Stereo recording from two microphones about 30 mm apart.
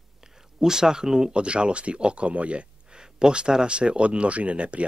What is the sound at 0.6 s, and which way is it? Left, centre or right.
Speech, centre.